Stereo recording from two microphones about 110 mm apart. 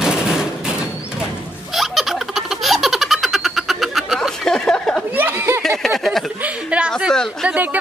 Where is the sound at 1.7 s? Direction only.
Centre (ahead or behind).